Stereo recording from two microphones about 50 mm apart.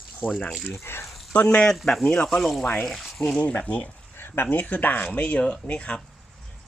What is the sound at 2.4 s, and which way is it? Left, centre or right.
Speech, centre.